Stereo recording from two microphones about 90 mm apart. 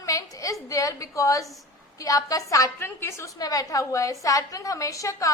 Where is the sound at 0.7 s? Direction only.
40° left (ahead or behind).